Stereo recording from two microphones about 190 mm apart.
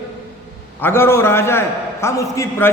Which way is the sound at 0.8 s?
10° left (ahead or behind).